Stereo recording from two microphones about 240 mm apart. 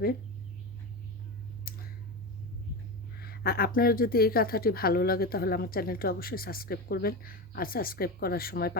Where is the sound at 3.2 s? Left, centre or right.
Left.